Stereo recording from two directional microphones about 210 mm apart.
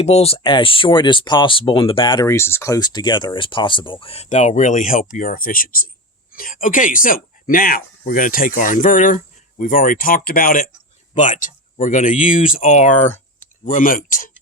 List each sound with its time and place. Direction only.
0.0 s speech: 30° left (ahead or behind)